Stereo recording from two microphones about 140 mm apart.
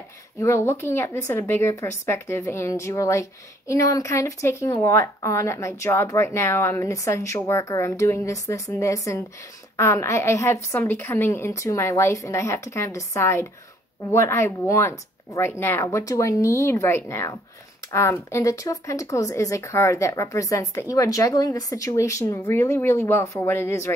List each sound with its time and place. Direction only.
0.4 s speech: 20° left (ahead or behind)